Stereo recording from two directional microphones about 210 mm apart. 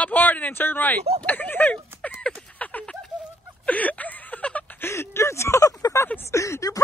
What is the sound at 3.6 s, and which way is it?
Speech, 5° left (ahead or behind).